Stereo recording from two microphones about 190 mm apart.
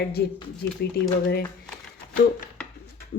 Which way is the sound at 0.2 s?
60° left (ahead or behind).